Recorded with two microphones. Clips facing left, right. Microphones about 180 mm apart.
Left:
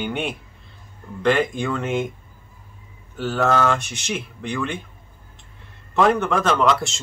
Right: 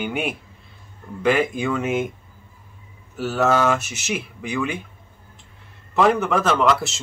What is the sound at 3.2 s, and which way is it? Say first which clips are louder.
Speech: right 1 dB; 5° right (ahead or behind).